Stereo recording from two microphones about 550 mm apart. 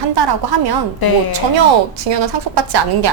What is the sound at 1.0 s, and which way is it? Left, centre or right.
Speech, left.